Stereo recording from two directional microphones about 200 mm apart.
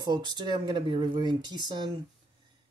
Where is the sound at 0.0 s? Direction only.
20° right (ahead or behind).